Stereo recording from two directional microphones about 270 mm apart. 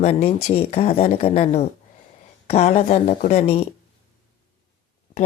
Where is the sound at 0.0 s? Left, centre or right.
Left.